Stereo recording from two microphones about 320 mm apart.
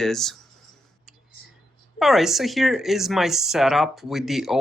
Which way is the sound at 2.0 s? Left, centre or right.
Centre.